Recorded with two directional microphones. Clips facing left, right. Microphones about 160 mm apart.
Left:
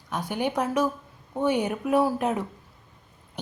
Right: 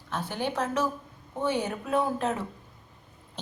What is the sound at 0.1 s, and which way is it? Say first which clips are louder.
A woman's voice: left 3 dB; 15° left (ahead or behind).